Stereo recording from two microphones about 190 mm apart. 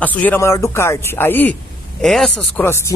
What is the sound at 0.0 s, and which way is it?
A man's voice, 10° left (ahead or behind).